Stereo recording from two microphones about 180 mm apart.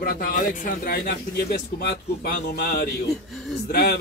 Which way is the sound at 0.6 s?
55° left (ahead or behind).